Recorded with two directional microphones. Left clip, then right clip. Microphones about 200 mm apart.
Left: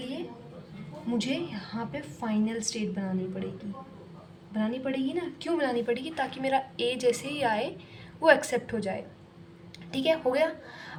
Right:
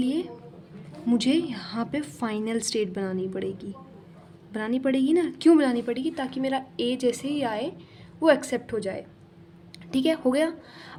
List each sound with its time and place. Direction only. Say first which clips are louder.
0.0 s a sound: right 9 dB; 45° right (ahead or behind)
1.2 s a woman's voice: right 7 dB; 45° right (ahead or behind)
4.5 s a woman's voice: right 5 dB; 50° right (ahead or behind); by 10.9 s 35° right (ahead or behind)